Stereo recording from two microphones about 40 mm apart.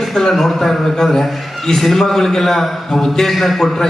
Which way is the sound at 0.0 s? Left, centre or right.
Centre.